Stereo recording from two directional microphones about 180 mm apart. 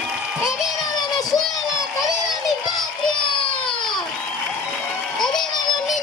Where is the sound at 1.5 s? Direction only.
Centre (ahead or behind).